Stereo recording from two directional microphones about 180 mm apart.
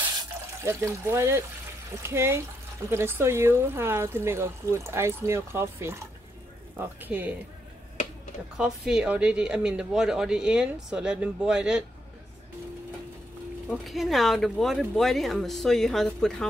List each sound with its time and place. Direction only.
0.7 s speech: 15° right (ahead or behind)
8.5 s speech: 5° right (ahead or behind)
13.7 s speech: centre (ahead or behind)